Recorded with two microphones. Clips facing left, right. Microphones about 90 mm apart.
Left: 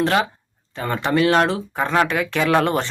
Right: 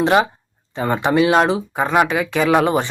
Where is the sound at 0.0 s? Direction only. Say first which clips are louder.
Right 4 dB; 20° right (ahead or behind).